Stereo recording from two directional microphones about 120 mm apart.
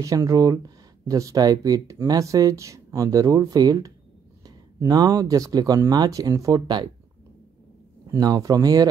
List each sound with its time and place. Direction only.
0.0 s speech: 30° right (ahead or behind)
8.1 s speech: 30° right (ahead or behind)